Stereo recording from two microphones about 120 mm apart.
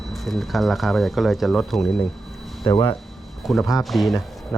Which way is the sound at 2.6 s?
45° left (ahead or behind).